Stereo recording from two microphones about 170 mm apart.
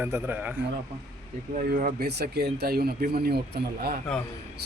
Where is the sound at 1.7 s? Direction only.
60° right (ahead or behind).